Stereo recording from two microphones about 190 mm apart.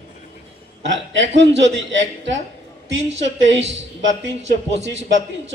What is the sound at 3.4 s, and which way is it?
Speech, 75° right (ahead or behind).